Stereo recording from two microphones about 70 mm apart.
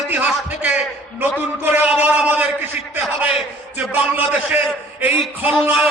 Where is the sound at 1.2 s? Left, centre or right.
Right.